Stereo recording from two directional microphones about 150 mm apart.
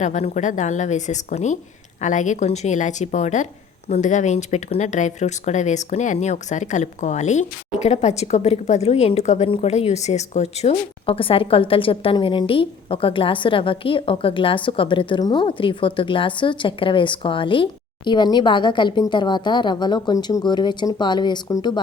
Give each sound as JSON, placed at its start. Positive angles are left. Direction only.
{"t": 0.0, "sound": "speech", "side_deg": 50}